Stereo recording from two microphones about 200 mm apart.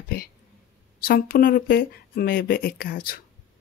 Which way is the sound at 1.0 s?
50° left (ahead or behind).